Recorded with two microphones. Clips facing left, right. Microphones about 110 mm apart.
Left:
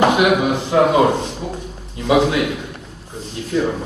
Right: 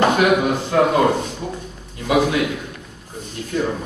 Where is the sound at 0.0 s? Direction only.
15° left (ahead or behind).